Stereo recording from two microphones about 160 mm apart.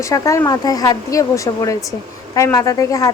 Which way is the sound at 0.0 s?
20° left (ahead or behind).